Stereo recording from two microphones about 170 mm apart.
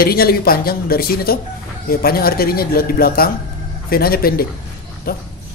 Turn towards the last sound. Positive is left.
turn(degrees=60)  # may be behind; listen again after turning